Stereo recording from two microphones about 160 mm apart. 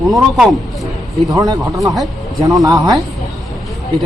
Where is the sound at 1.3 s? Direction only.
20° right (ahead or behind).